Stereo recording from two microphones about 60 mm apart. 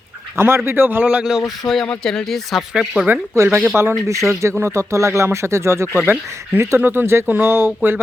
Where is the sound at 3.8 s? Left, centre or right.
Right.